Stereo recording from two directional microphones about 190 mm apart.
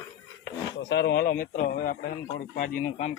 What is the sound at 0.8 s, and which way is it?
Speech, 65° left (ahead or behind).